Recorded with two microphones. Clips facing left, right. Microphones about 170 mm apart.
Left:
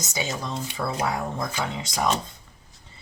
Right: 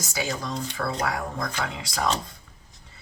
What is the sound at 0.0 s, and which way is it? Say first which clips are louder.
Speech: even; 20° left (ahead or behind).